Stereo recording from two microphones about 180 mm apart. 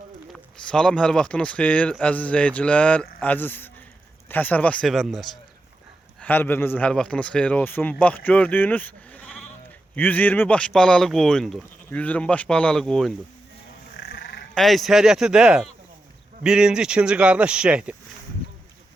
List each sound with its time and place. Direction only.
0.3 s speech: 5° left (ahead or behind)
13.9 s cat: 55° left (ahead or behind)
14.5 s speech: centre (ahead or behind)